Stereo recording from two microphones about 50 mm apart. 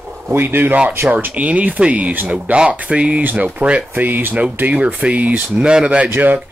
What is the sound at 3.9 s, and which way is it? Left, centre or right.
Speech, right.